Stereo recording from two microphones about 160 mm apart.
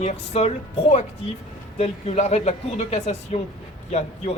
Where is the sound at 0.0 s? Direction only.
40° left (ahead or behind).